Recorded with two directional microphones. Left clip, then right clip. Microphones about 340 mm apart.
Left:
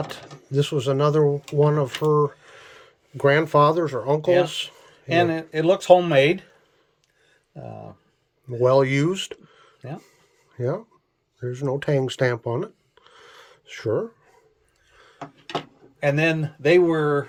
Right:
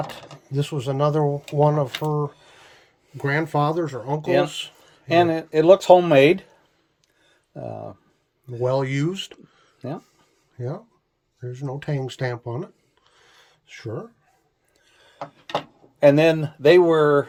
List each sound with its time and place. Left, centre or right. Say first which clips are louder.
0.5 s speech: left 4 dB; centre
3.2 s speech: left 6 dB; centre
5.0 s speech: right 2 dB; centre
7.6 s speech: right 5 dB; right
8.6 s speech: left 5 dB; centre
16.0 s speech: right 6 dB; centre